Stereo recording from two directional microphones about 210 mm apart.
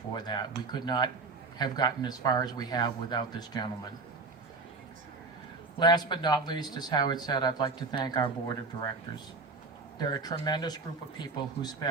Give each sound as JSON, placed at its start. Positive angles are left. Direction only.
{"t": 0.1, "sound": "speech", "side_deg": 20}
{"t": 5.8, "sound": "speech", "side_deg": 20}
{"t": 10.0, "sound": "speech", "side_deg": 20}